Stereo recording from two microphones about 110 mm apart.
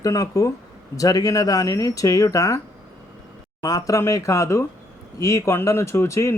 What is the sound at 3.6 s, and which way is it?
Speech, 30° left (ahead or behind).